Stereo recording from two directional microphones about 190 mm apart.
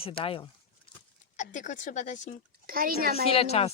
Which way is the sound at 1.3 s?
40° left (ahead or behind).